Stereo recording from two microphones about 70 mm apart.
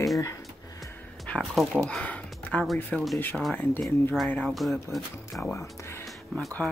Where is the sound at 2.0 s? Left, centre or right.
Centre.